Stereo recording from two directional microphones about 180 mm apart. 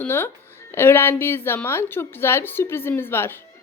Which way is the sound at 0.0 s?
10° left (ahead or behind).